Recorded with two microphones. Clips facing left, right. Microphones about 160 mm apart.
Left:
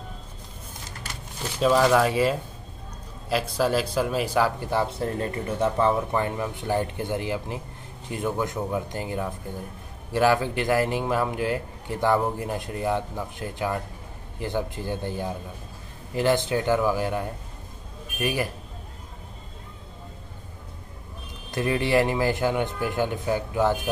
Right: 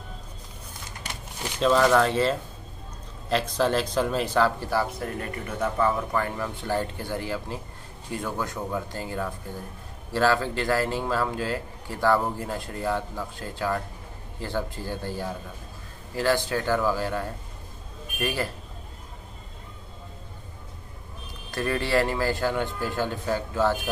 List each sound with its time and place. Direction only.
1.6 s speech: 5° left (ahead or behind)
21.5 s speech: 20° left (ahead or behind)